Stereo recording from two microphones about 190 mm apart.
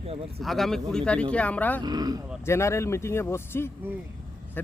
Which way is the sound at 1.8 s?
20° right (ahead or behind).